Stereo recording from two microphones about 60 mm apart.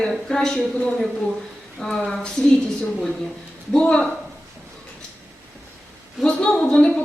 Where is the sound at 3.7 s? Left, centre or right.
Centre.